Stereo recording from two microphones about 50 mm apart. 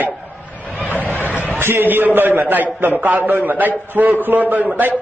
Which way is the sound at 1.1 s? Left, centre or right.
Left.